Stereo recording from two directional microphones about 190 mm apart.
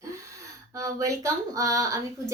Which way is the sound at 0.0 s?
15° right (ahead or behind).